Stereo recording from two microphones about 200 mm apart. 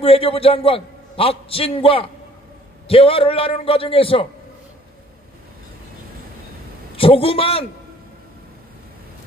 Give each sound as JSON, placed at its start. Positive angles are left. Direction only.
{"t": 0.0, "sound": "a man's voice", "side_deg": 30}
{"t": 7.0, "sound": "a man's voice", "side_deg": 25}